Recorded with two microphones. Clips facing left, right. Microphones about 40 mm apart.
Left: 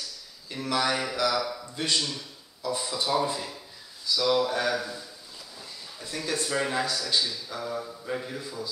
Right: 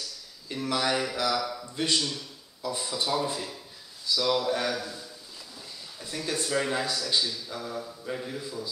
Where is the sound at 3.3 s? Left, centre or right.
Centre.